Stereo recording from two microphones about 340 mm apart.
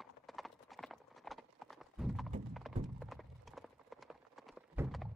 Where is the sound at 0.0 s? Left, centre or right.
Centre.